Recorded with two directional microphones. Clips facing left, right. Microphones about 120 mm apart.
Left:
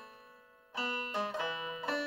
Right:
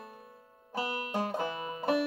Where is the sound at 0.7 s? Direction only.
45° right (ahead or behind).